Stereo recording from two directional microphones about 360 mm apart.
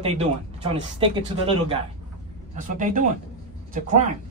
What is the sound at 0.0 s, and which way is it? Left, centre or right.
A man's voice, centre.